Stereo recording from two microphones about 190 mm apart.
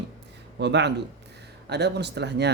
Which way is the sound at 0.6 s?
65° right (ahead or behind).